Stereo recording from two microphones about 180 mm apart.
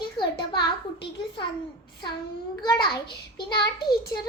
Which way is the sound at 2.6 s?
25° left (ahead or behind).